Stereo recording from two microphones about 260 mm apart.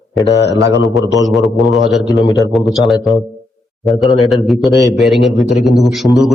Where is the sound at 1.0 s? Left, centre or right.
Centre.